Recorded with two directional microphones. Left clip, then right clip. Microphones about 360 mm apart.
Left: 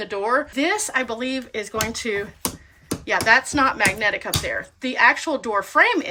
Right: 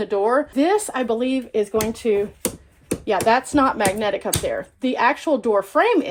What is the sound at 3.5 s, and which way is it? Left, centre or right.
Speech, centre.